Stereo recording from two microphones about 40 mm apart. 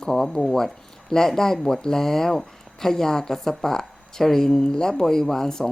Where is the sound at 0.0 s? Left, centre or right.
Centre.